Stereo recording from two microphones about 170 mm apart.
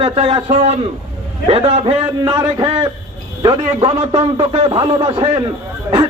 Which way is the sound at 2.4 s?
15° right (ahead or behind).